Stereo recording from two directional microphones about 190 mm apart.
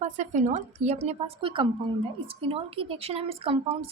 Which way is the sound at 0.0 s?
40° right (ahead or behind).